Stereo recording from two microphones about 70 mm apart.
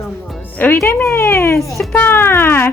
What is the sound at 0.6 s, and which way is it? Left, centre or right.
Speech, left.